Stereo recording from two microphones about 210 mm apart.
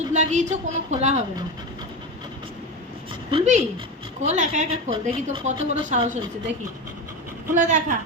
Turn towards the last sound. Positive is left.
turn(degrees=-35)  # may be behind; listen again after turning